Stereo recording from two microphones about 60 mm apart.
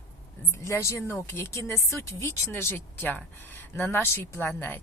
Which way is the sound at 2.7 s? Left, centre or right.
Left.